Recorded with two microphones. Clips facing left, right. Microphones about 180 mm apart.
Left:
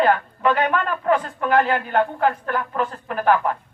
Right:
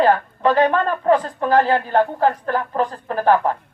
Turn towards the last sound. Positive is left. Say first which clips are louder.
# right 3 dB
turn(degrees=-35)  # may be behind; listen again after turning